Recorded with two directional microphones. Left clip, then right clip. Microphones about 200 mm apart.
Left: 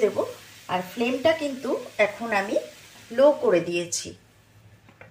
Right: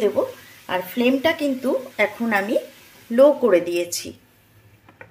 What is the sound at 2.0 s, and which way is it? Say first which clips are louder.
Speech: even; 40° right (ahead or behind).